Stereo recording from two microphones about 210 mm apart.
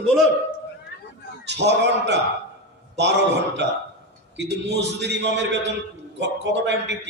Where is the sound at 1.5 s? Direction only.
55° right (ahead or behind).